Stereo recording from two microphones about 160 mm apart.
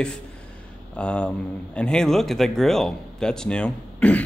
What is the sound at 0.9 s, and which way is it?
Speech, 5° left (ahead or behind).